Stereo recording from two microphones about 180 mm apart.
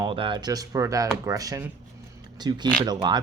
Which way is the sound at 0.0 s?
25° right (ahead or behind).